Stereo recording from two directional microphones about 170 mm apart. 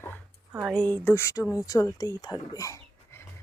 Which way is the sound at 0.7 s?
5° left (ahead or behind).